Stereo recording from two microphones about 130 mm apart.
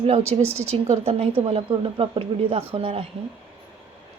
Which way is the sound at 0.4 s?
10° left (ahead or behind).